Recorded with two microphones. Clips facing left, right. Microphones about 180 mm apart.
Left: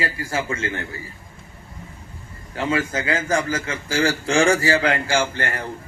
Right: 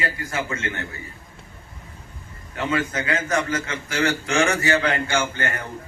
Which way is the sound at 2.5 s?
30° left (ahead or behind).